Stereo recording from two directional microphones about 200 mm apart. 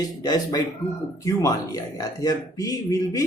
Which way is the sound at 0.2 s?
20° left (ahead or behind).